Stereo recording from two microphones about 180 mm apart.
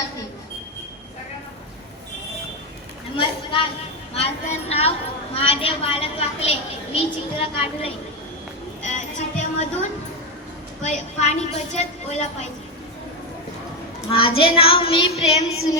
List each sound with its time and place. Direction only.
3.2 s a sound: 30° left (ahead or behind)
4.1 s a woman's voice: 35° left (ahead or behind)
8.8 s music: 40° left (ahead or behind)
10.8 s a woman's voice: 40° left (ahead or behind)
14.1 s a woman's voice: 30° left (ahead or behind)